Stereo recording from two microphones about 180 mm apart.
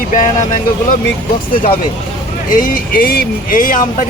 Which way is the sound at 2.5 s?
50° left (ahead or behind).